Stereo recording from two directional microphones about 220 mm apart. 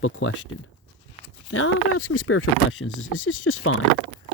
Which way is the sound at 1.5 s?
65° left (ahead or behind).